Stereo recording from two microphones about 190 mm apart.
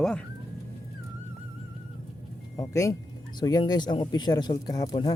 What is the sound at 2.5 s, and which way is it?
Speech, 15° left (ahead or behind).